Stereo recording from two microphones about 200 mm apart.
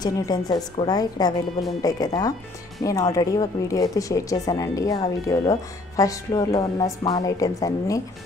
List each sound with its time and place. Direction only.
0.0 s a woman's voice: 20° left (ahead or behind)